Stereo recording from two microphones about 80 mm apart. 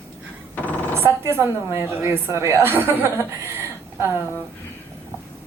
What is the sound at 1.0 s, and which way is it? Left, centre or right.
A woman's voice, right.